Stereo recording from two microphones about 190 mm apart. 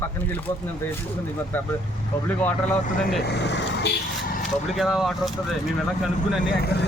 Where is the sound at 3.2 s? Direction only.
65° left (ahead or behind).